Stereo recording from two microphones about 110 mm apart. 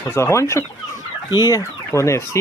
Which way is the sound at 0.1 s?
25° left (ahead or behind).